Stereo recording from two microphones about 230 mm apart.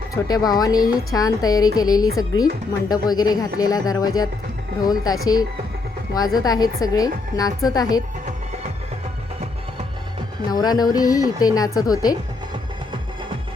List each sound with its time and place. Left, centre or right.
0.3 s a woman's voice: centre
10.5 s a woman's voice: centre